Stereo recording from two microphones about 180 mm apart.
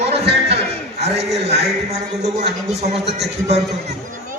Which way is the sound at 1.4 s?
35° right (ahead or behind).